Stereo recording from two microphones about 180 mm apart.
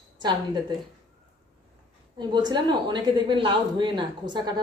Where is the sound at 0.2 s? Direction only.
25° right (ahead or behind).